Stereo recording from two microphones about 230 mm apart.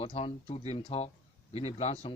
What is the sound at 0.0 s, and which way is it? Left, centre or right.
A man's voice, left.